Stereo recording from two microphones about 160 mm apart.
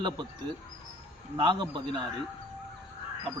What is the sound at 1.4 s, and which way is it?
Speech, 30° right (ahead or behind).